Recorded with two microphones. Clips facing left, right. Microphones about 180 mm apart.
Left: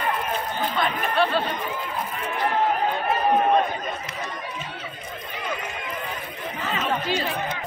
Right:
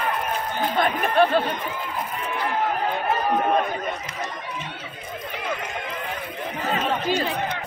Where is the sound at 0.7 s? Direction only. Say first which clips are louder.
Right 4 dB; 50° right (ahead or behind).